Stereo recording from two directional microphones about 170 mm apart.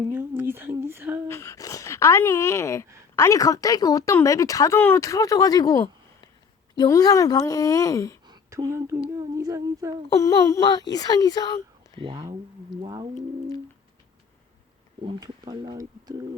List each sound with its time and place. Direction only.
0.1 s a sound: 10° right (ahead or behind)
1.3 s a sound: 15° left (ahead or behind)
3.2 s speech: 20° left (ahead or behind)
8.3 s humming: 20° right (ahead or behind)
10.1 s speech: 20° left (ahead or behind)
11.9 s speech: 30° right (ahead or behind)
15.0 s speech: 25° right (ahead or behind)